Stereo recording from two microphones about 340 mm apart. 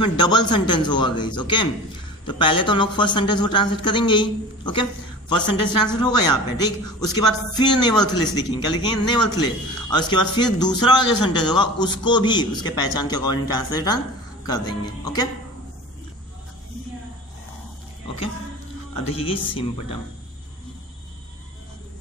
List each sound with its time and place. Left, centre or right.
0.0 s speech: centre
5.9 s speech: centre
18.9 s speech: centre